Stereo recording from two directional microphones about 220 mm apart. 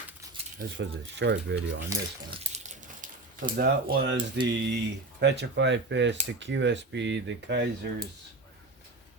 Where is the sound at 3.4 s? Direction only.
45° right (ahead or behind).